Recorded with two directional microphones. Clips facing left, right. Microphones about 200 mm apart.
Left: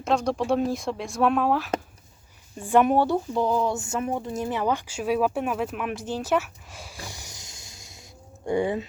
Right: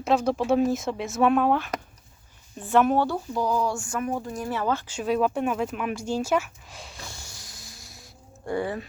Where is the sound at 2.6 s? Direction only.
10° left (ahead or behind).